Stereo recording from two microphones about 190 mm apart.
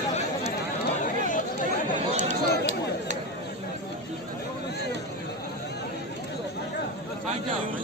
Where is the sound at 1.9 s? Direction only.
40° right (ahead or behind).